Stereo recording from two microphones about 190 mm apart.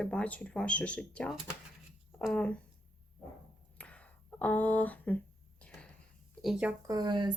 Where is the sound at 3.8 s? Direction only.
5° left (ahead or behind).